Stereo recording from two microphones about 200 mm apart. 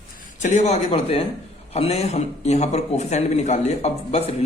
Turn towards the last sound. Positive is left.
turn(degrees=35)  # may be behind; listen again after turning